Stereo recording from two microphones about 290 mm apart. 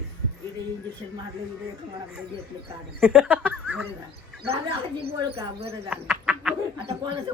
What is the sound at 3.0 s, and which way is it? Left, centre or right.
Speech, centre.